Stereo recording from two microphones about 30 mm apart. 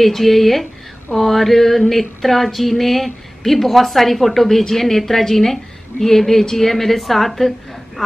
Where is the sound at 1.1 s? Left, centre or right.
Centre.